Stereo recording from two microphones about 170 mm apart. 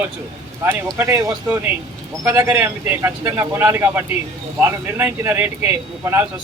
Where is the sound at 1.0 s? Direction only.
15° right (ahead or behind).